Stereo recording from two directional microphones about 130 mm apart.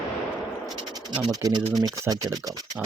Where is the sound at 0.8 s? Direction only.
35° right (ahead or behind).